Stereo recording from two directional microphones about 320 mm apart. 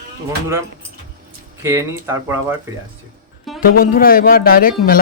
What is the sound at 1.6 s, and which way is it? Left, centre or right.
Speech, centre.